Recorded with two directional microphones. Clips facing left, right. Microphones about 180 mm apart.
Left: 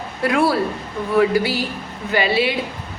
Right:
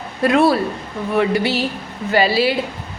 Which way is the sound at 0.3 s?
25° right (ahead or behind).